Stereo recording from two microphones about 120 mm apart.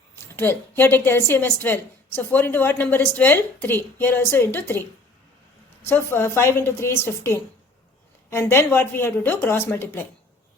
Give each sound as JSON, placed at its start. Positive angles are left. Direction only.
{"t": 0.3, "sound": "a woman's voice", "side_deg": 15}
{"t": 5.8, "sound": "a woman's voice", "side_deg": 20}